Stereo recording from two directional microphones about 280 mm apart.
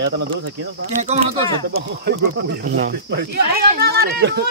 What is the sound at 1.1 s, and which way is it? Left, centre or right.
Speech, right.